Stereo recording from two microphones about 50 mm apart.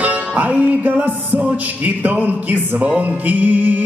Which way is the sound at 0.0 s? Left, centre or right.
Right.